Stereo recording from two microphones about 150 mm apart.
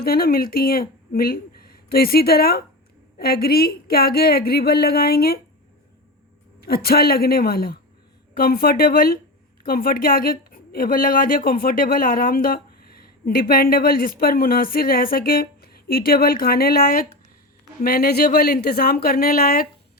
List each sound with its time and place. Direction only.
0.0 s a woman's voice: 85° left
6.6 s a woman's voice: 90° left